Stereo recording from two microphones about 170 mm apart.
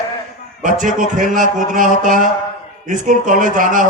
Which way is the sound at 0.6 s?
50° right (ahead or behind).